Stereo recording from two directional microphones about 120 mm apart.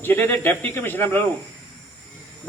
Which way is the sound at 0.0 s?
15° left (ahead or behind).